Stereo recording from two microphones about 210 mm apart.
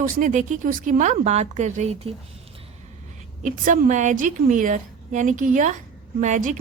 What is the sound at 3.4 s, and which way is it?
Speech, 35° right (ahead or behind).